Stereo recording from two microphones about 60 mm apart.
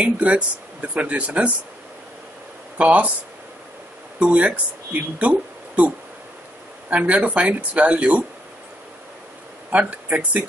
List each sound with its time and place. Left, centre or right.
0.0 s speech: right
2.8 s speech: right
4.2 s speech: right
9.7 s speech: right